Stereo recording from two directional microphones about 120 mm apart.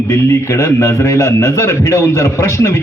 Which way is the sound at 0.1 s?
20° left (ahead or behind).